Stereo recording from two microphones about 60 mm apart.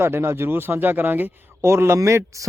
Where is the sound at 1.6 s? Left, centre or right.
Right.